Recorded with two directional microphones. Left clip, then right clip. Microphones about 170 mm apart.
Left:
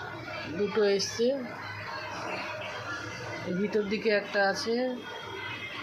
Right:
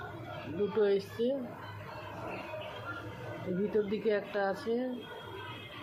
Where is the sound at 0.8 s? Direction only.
20° left (ahead or behind).